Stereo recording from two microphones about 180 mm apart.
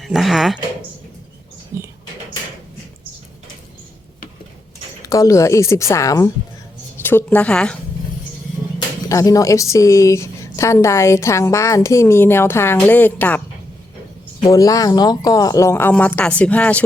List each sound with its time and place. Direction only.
0.0 s speech: centre (ahead or behind)
1.7 s a sound: 15° right (ahead or behind)
5.0 s a woman's voice: 20° left (ahead or behind)
9.0 s a woman's voice: 20° left (ahead or behind)
14.4 s a woman's voice: 20° left (ahead or behind)